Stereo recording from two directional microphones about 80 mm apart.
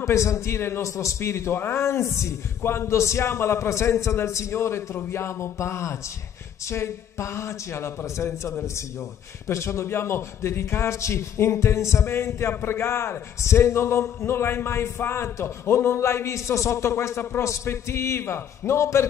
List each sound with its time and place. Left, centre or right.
0.0 s a man's voice: left